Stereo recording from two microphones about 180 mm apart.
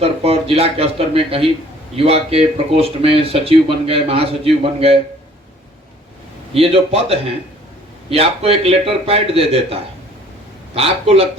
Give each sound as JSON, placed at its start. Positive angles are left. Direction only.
{"t": 0.0, "sound": "a man's voice", "side_deg": -35}
{"t": 6.5, "sound": "a man's voice", "side_deg": -35}